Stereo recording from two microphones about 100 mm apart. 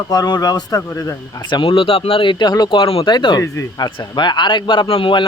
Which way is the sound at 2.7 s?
65° left (ahead or behind).